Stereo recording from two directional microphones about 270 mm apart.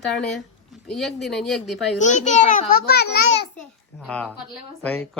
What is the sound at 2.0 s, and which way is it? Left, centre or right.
A child's voice, left.